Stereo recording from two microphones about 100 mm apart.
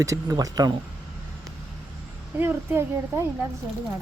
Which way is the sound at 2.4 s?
25° right (ahead or behind).